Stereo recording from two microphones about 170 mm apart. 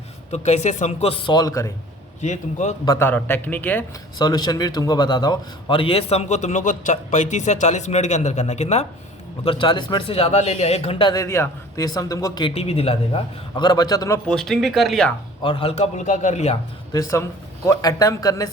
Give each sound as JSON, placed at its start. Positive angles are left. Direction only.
{"t": 0.3, "sound": "speech", "side_deg": 40}
{"t": 2.2, "sound": "a man's voice", "side_deg": 45}
{"t": 2.8, "sound": "a man's voice", "side_deg": 15}
{"t": 4.2, "sound": "a man's voice", "side_deg": 25}
{"t": 9.4, "sound": "speech", "side_deg": 30}
{"t": 11.1, "sound": "a man's voice", "side_deg": 15}
{"t": 14.3, "sound": "speech", "side_deg": 5}
{"t": 15.4, "sound": "speech", "side_deg": 35}
{"t": 16.9, "sound": "a man's voice", "side_deg": 20}